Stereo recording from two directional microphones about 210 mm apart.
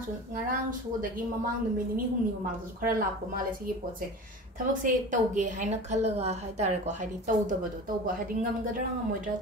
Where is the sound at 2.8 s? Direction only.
40° right (ahead or behind).